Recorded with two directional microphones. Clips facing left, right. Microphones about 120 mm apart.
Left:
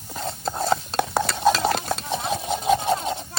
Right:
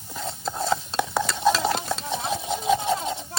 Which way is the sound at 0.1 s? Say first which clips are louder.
Left 2 dB; 60° left (ahead or behind).